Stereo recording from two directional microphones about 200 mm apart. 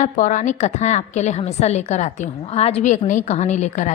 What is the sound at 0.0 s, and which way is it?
A woman's voice, 40° left (ahead or behind).